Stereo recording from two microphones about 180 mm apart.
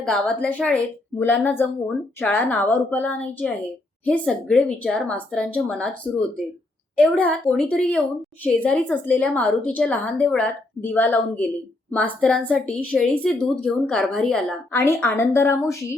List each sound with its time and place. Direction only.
0.0 s a woman's voice: 5° left (ahead or behind)
6.9 s a woman's voice: 5° left (ahead or behind)